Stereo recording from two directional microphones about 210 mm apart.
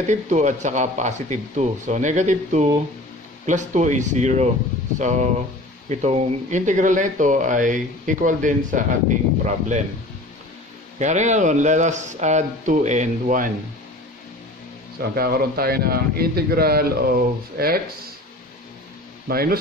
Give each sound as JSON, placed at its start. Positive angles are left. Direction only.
{"t": 0.1, "sound": "speech", "side_deg": -35}
{"t": 11.0, "sound": "speech", "side_deg": -35}
{"t": 15.0, "sound": "speech", "side_deg": -45}
{"t": 19.2, "sound": "speech", "side_deg": -45}